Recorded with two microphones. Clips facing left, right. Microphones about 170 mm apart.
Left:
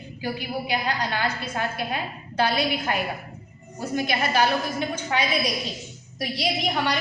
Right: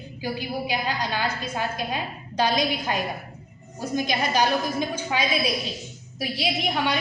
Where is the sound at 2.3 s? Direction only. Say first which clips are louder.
Even; 15° right (ahead or behind).